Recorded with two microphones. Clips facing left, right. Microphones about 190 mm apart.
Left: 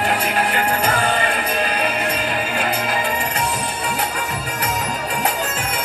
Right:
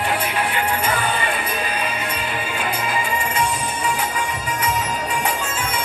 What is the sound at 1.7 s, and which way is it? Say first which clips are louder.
Music: left 4 dB; 65° left (ahead or behind).